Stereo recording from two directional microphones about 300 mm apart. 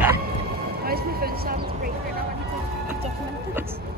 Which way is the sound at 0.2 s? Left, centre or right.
Right.